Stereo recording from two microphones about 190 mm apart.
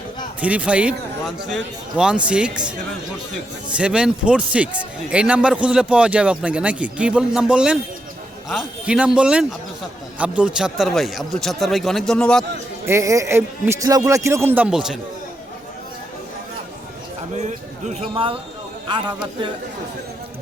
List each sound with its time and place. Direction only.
0.4 s a man's voice: 5° right (ahead or behind)
12.8 s a man's voice: 15° right (ahead or behind)
17.3 s speech: 40° right (ahead or behind)